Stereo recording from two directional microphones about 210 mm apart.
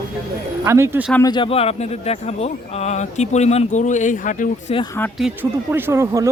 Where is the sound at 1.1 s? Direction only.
15° left (ahead or behind); by 4.8 s 40° left (ahead or behind).